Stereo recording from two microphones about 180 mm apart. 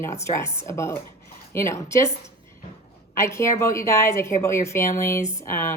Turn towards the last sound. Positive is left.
turn(degrees=15)  # may be behind; listen again after turning